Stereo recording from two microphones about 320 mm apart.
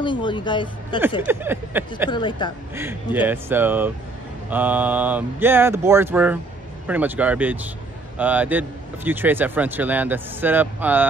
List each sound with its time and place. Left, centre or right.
0.0 s speech: centre
1.2 s speech: centre
2.0 s speech: centre
2.7 s speech: centre